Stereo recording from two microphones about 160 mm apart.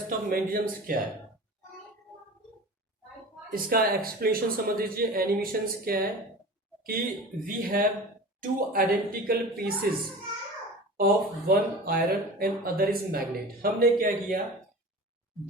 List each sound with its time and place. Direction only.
0.3 s a man's voice: 60° right (ahead or behind)
3.5 s a man's voice: 65° right (ahead or behind)
10.9 s speech: 70° right (ahead or behind)